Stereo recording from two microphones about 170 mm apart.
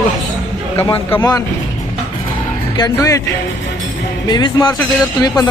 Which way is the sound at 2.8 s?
20° left (ahead or behind).